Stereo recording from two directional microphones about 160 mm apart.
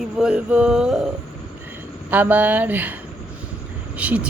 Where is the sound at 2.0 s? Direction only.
10° right (ahead or behind).